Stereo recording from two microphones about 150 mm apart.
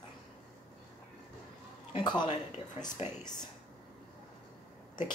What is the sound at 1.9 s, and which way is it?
Speech, 30° left (ahead or behind).